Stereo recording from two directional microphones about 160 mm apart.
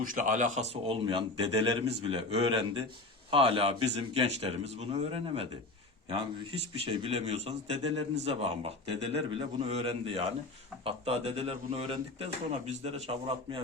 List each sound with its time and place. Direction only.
0.0 s a man's voice: 55° right (ahead or behind); by 5.5 s 35° right (ahead or behind)
6.7 s a man's voice: 35° right (ahead or behind)